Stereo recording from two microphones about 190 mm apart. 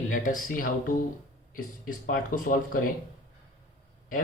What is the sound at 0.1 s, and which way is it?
Speech, 45° left (ahead or behind).